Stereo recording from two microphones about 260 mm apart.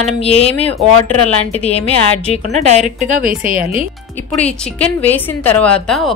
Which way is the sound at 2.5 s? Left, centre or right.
Right.